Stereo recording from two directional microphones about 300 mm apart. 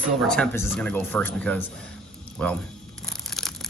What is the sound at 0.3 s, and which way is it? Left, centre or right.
Speech, centre.